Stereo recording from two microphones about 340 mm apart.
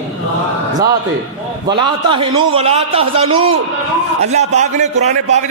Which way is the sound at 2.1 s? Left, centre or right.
Centre.